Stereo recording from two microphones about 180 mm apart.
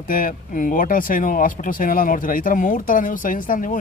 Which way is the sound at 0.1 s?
50° left (ahead or behind).